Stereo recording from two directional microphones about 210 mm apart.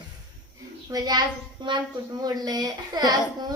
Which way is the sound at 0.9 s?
20° right (ahead or behind).